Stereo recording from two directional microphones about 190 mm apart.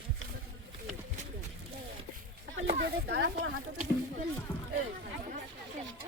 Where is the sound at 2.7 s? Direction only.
65° right (ahead or behind).